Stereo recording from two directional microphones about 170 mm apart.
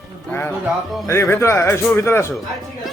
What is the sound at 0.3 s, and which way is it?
Speech, 15° left (ahead or behind).